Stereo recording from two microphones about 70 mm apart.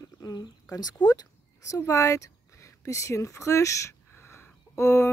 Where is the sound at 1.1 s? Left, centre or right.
Left.